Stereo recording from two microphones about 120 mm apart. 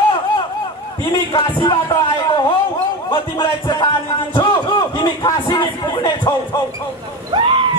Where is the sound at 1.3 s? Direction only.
35° left (ahead or behind).